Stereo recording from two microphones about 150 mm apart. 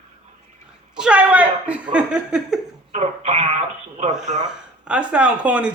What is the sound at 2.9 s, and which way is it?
Speech, 45° right (ahead or behind).